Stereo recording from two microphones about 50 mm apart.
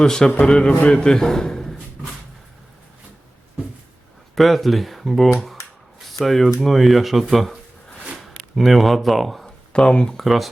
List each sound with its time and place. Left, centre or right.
0.0 s a man's voice: centre
4.4 s speech: centre
9.7 s speech: centre
10.2 s speech: centre